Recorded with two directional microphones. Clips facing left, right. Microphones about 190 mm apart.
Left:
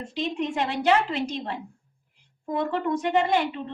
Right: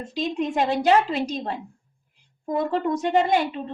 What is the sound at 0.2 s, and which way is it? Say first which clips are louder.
Speech: right 3 dB; 35° right (ahead or behind).